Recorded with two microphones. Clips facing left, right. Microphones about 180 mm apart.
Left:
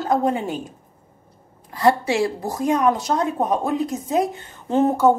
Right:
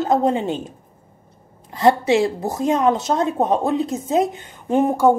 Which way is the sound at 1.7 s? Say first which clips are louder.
Right 3 dB; 20° right (ahead or behind).